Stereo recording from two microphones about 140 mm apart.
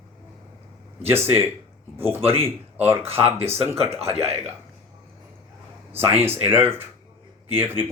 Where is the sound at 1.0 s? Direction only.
15° right (ahead or behind).